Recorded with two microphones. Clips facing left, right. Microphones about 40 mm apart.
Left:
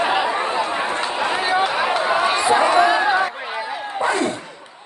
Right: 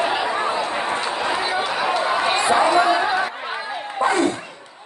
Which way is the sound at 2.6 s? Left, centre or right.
Left.